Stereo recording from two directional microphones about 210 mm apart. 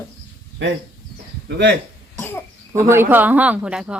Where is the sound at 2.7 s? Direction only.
10° right (ahead or behind).